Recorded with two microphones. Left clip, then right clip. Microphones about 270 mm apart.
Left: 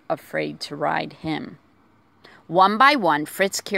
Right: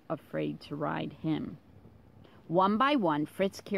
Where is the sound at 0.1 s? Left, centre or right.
Left.